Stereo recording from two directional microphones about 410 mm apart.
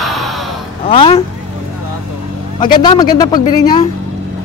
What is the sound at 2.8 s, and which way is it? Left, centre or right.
A man's voice, centre.